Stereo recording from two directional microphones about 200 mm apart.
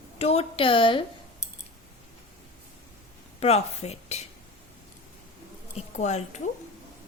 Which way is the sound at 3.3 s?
30° left (ahead or behind).